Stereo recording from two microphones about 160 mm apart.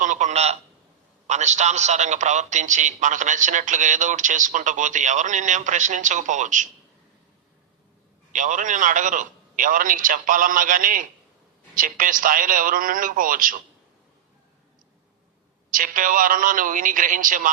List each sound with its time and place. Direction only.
0.0 s a sound: 50° right (ahead or behind)
1.3 s a man's voice: 45° right (ahead or behind)
8.3 s a man's voice: 50° right (ahead or behind)
15.7 s a man's voice: 60° right (ahead or behind)